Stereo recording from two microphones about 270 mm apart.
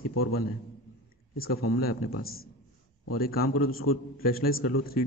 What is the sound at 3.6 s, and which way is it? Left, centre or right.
Speech, left.